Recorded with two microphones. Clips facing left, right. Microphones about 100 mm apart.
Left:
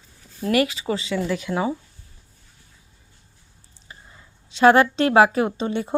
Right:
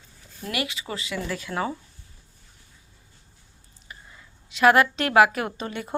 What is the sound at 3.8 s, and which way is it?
A woman's voice, 30° left (ahead or behind).